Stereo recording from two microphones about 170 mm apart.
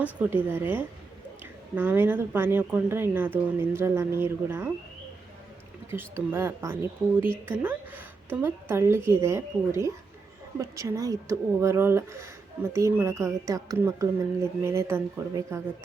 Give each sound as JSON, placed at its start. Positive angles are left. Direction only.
{"t": 0.0, "sound": "speech", "side_deg": -10}
{"t": 5.9, "sound": "speech", "side_deg": -15}